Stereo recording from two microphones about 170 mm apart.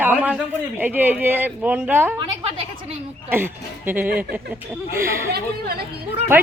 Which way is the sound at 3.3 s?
10° right (ahead or behind).